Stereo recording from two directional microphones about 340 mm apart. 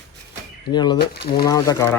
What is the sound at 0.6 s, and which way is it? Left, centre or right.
Speech, centre.